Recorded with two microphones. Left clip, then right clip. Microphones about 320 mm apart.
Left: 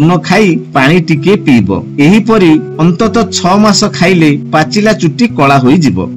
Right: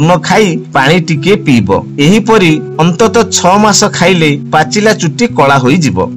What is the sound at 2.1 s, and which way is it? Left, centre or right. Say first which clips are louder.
Speech: right 1 dB; right.